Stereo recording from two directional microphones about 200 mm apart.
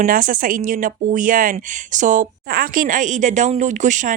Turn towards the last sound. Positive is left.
turn(degrees=-40)  # may be behind; listen again after turning